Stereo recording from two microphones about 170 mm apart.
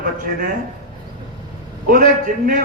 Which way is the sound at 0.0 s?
55° right (ahead or behind).